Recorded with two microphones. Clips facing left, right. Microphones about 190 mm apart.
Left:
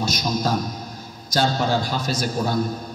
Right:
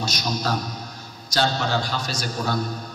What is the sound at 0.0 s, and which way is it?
Speech, 50° left (ahead or behind).